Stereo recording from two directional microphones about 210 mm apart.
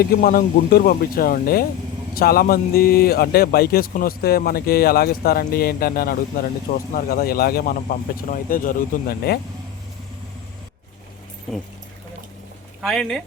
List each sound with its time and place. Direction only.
0.0 s speech: 45° left (ahead or behind)
12.8 s speech: centre (ahead or behind)